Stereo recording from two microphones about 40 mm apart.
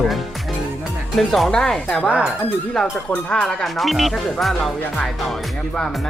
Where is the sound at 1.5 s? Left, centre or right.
Centre.